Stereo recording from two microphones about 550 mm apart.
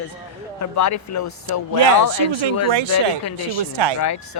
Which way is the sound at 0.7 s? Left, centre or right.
Left.